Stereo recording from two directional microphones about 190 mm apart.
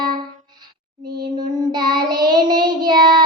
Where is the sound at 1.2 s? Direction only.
20° right (ahead or behind).